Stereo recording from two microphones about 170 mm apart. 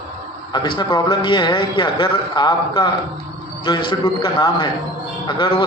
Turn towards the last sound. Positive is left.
turn(degrees=25)  # may be behind; listen again after turning